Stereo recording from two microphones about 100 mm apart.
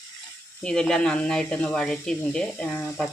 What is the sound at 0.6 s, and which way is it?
Speech, 10° left (ahead or behind).